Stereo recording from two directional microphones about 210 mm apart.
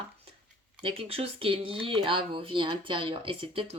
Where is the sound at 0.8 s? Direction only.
25° right (ahead or behind).